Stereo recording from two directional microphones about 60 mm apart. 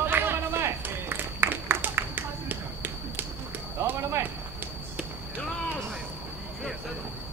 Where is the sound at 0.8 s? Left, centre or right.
Right.